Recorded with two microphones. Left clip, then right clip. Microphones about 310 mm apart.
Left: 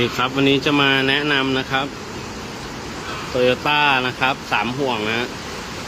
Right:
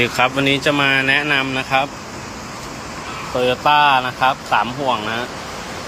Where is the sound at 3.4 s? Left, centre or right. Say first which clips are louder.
Right 3 dB; centre.